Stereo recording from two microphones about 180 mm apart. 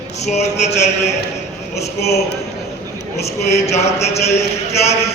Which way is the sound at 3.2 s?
35° left (ahead or behind).